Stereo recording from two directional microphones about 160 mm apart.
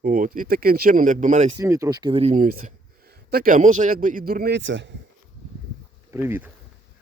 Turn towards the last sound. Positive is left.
turn(degrees=-15)  # may be behind; listen again after turning